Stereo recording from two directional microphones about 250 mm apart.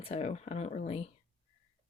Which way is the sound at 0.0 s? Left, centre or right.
Left.